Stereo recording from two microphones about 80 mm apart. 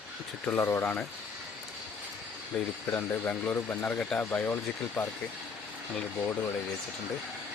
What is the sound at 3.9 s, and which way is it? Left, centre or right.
Speech, centre.